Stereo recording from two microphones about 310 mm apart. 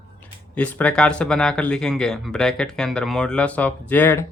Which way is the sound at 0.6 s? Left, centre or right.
Centre.